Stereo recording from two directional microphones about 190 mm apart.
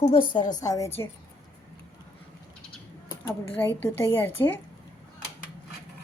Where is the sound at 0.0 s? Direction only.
30° left (ahead or behind).